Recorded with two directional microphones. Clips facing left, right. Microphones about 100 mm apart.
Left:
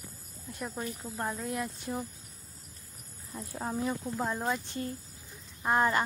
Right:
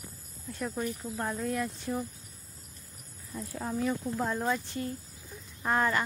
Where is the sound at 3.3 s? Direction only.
25° left (ahead or behind).